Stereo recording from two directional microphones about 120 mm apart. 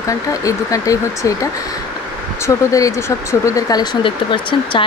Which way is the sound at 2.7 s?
25° left (ahead or behind).